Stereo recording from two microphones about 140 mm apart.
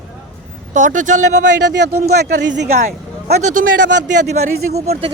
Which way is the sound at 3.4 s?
65° right (ahead or behind).